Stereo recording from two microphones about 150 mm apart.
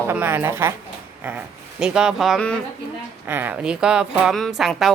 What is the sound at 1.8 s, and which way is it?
Speech, 5° right (ahead or behind).